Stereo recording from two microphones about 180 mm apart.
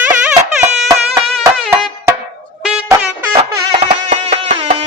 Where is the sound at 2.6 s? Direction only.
5° right (ahead or behind).